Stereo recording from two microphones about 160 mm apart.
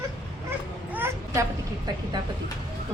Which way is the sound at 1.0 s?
15° right (ahead or behind).